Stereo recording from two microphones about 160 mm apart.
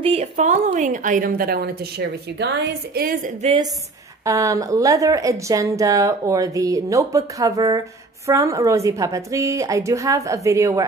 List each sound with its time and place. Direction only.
0.0 s a woman's voice: 40° right (ahead or behind); by 3.2 s 70° right (ahead or behind)
4.2 s a woman's voice: 20° right (ahead or behind)